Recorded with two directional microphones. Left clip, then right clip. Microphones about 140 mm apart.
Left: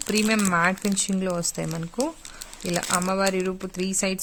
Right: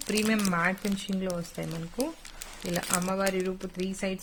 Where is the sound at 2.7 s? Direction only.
40° left (ahead or behind).